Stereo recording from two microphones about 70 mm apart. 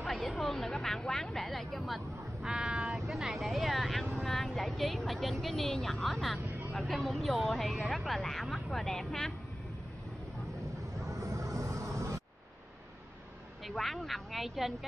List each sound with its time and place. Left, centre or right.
0.0 s a sound: centre
2.4 s vehicle: centre
6.7 s speech: centre
11.1 s vehicle: right
13.7 s speech: centre